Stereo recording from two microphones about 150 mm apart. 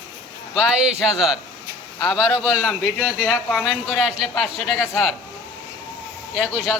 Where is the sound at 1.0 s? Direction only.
Centre (ahead or behind).